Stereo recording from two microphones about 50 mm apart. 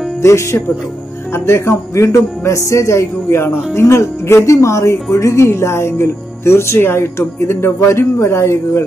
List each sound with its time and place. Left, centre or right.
0.2 s speech: left
5.1 s speech: left